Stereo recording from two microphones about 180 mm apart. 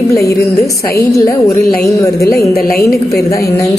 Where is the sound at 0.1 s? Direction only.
20° left (ahead or behind).